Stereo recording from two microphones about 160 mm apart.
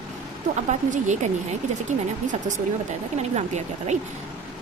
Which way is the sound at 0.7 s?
50° right (ahead or behind).